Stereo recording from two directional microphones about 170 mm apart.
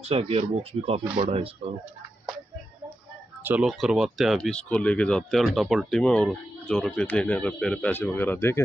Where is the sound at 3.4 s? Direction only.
5° right (ahead or behind); by 8.5 s 15° left (ahead or behind).